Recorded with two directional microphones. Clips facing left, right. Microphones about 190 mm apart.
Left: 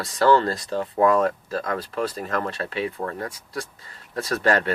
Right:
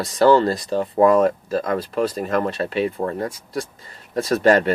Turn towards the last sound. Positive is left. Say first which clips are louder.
# right 6 dB
turn(degrees=-20)  # may be behind; listen again after turning